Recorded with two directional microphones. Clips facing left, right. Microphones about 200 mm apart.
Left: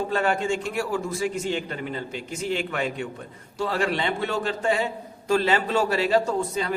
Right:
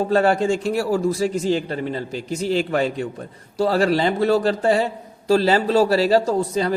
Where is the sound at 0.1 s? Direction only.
35° right (ahead or behind).